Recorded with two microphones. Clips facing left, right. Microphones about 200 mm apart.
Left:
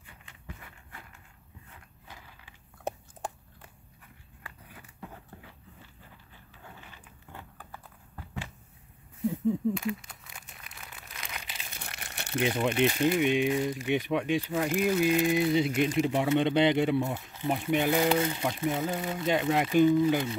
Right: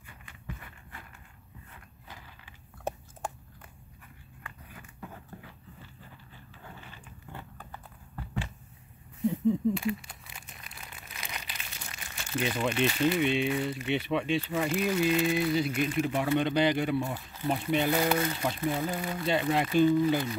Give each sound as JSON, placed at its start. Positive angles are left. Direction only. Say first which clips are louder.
{"t": 9.2, "sound": "a sound", "louder": "right 1 dB", "side_deg": 0}
{"t": 11.8, "sound": "crumpling", "louder": "left 2 dB", "side_deg": 65}
{"t": 12.4, "sound": "speech", "louder": "left 2 dB", "side_deg": 15}
{"t": 18.9, "sound": "speech", "louder": "left 1 dB", "side_deg": 20}